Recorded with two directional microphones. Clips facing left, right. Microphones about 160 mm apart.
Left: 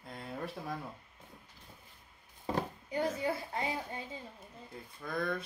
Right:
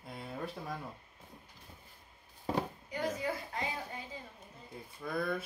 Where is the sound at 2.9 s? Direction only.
30° left (ahead or behind).